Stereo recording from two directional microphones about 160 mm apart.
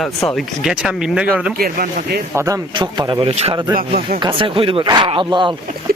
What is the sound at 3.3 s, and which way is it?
Speech, 40° right (ahead or behind).